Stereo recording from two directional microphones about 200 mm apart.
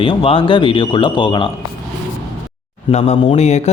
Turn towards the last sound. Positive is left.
turn(degrees=35)  # may be behind; listen again after turning